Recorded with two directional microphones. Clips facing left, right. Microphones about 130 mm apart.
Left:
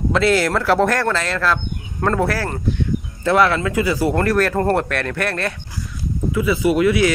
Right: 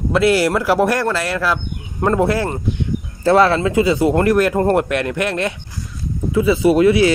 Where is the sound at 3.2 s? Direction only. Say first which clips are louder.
Right 3 dB; 30° right (ahead or behind).